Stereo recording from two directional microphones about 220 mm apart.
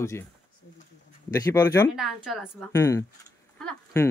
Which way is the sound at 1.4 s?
10° left (ahead or behind).